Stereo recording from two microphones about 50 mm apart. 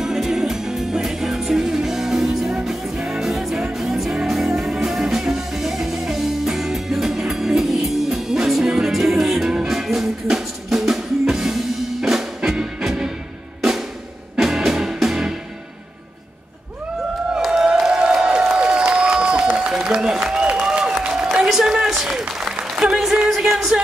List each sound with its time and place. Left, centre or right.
0.0 s music: centre
13.6 s drum: centre
14.4 s music: centre
17.5 s music: centre
18.6 s a sound: centre
19.9 s applause: centre